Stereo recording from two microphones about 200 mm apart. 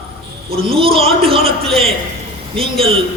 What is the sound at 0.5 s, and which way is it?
A man's voice, 30° right (ahead or behind).